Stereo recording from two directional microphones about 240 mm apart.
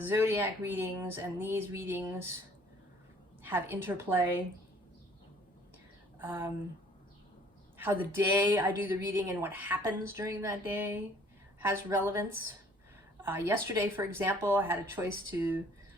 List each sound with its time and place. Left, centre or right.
0.1 s speech: centre
3.4 s speech: centre
6.1 s speech: centre
7.8 s speech: centre